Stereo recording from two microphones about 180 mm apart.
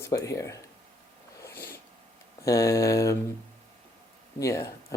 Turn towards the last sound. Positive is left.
turn(degrees=15)  # may be behind; listen again after turning